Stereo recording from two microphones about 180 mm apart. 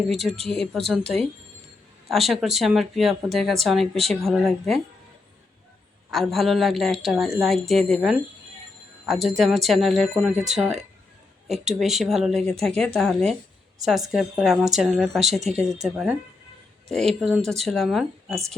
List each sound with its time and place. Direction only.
0.1 s a woman's voice: centre (ahead or behind)
2.0 s a woman's voice: centre (ahead or behind)
6.1 s a woman's voice: centre (ahead or behind)